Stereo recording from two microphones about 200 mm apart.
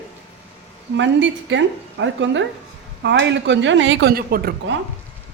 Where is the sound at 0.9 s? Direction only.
65° right (ahead or behind); by 4.5 s 50° right (ahead or behind).